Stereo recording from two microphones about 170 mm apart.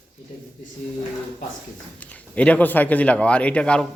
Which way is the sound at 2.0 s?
10° left (ahead or behind).